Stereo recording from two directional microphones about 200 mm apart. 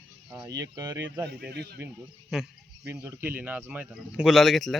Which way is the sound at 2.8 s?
15° right (ahead or behind).